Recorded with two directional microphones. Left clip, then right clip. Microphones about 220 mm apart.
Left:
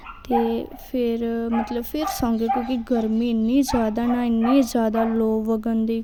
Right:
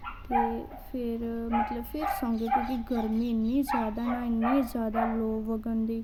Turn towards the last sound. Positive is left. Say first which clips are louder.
# left 8 dB
turn(degrees=40)  # may be behind; listen again after turning